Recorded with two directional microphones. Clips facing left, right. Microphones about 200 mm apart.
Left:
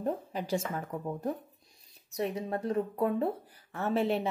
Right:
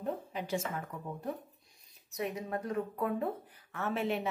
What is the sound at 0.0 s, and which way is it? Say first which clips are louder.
A woman's voice: left 4 dB; 40° left (ahead or behind).